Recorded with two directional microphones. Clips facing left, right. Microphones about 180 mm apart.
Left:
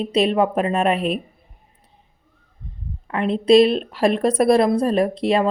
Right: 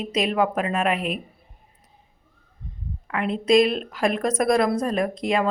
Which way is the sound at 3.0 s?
30° left (ahead or behind).